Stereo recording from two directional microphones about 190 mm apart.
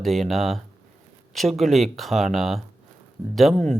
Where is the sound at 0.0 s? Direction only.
Centre (ahead or behind).